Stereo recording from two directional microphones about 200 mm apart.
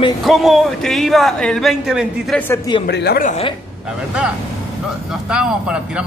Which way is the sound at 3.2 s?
35° left (ahead or behind).